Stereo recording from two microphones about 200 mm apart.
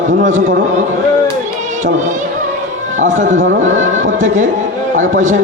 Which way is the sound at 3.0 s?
40° right (ahead or behind).